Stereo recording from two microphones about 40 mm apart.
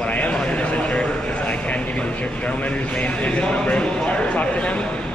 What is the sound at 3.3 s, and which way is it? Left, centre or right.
A man's voice, left.